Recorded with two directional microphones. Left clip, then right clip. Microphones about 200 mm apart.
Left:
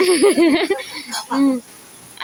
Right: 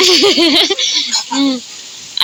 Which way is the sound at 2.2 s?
10° left (ahead or behind).